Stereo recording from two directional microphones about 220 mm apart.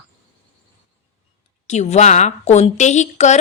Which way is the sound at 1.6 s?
30° left (ahead or behind).